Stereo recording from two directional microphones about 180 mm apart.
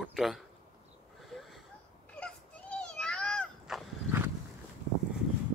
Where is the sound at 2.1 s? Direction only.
5° left (ahead or behind).